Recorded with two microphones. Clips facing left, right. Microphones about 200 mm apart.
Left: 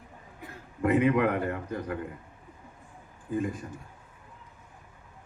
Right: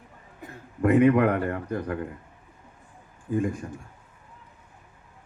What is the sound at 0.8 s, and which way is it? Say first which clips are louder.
Speech: right 5 dB; 55° right (ahead or behind).